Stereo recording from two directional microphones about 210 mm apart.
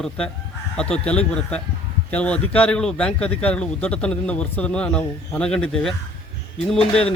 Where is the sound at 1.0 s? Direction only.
5° left (ahead or behind).